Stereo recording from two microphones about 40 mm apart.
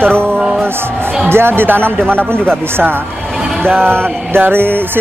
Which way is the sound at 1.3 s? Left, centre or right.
Right.